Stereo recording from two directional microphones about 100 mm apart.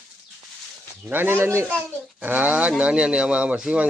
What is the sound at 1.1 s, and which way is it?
Speech, 20° right (ahead or behind).